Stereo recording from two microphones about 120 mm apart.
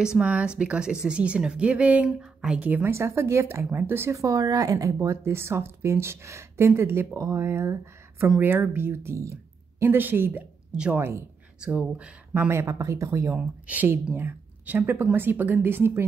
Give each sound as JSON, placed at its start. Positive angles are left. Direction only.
{"t": 0.0, "sound": "a woman's voice", "side_deg": -5}
{"t": 11.0, "sound": "speech", "side_deg": -20}
{"t": 13.3, "sound": "speech", "side_deg": -15}